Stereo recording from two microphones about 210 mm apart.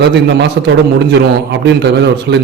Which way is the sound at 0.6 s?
50° right (ahead or behind).